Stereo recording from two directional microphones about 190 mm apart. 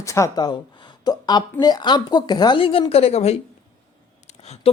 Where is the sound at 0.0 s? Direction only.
15° left (ahead or behind).